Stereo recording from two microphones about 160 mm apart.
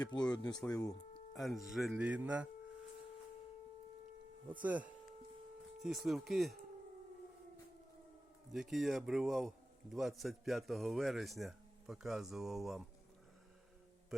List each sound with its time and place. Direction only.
0.0 s speech: 25° left (ahead or behind)
1.3 s speech: centre (ahead or behind)
4.4 s a man's voice: 10° right (ahead or behind)
8.5 s a man's voice: centre (ahead or behind)